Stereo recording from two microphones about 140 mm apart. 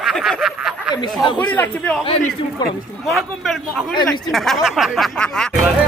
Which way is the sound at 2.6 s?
30° left (ahead or behind).